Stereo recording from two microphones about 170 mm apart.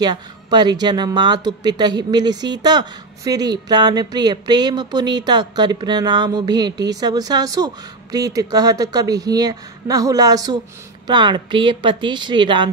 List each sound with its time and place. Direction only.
0.0 s speech: 25° right (ahead or behind)